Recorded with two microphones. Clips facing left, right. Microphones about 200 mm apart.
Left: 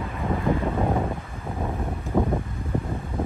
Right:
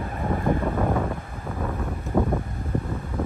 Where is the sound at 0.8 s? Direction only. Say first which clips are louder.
Even; 15° left (ahead or behind).